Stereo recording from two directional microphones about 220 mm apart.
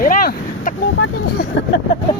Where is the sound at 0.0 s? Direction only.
40° left (ahead or behind).